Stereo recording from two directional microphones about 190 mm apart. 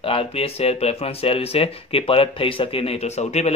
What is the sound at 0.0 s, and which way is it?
Speech, 30° left (ahead or behind).